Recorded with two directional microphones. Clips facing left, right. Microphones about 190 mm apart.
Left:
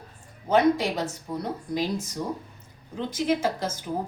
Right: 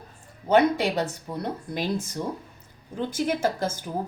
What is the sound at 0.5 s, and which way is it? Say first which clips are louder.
Speech: right 1 dB; 65° right (ahead or behind).